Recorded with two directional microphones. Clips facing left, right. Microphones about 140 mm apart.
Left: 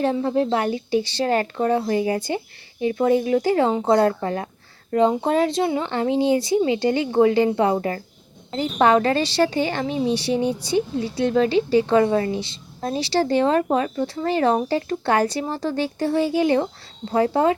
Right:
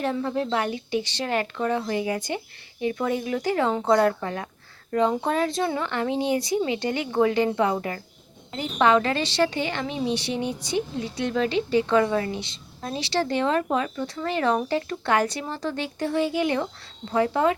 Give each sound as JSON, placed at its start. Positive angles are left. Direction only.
{"t": 0.0, "sound": "a woman's voice", "side_deg": 30}